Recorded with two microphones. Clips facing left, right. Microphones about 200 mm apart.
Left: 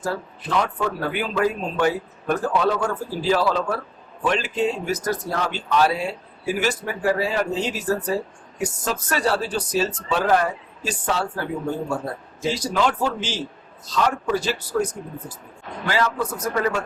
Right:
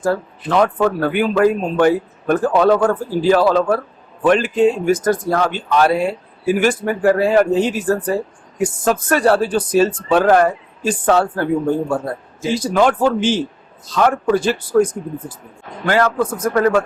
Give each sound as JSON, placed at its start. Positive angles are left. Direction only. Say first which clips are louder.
{"t": 0.0, "sound": "speech", "louder": "right 8 dB", "side_deg": -55}
{"t": 12.5, "sound": "speech", "louder": "right 6 dB", "side_deg": -55}